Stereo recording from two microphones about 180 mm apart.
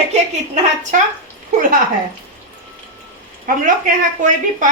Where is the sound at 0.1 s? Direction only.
40° right (ahead or behind).